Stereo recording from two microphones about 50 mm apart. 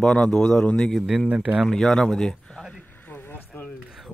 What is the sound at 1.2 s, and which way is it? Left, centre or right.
Speech, right.